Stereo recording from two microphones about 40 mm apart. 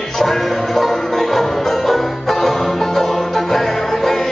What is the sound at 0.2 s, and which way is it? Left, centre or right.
Music, centre.